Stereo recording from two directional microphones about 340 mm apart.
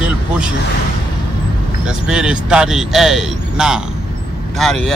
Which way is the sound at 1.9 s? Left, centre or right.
Centre.